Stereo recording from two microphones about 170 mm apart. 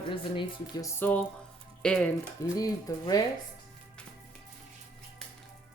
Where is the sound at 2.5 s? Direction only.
20° left (ahead or behind).